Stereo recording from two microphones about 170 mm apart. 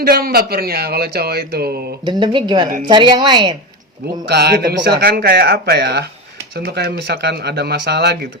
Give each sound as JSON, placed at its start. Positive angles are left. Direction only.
{"t": 0.0, "sound": "speech", "side_deg": -65}
{"t": 2.0, "sound": "a woman's voice", "side_deg": -25}
{"t": 4.3, "sound": "speech", "side_deg": -75}